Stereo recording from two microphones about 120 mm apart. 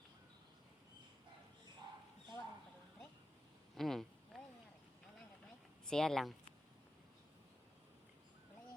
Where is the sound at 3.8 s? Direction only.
Centre (ahead or behind).